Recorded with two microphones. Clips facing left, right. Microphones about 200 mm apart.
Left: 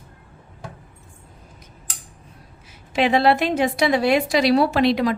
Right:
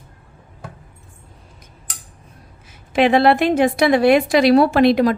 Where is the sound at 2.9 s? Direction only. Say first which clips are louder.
Right 4 dB; 55° right (ahead or behind).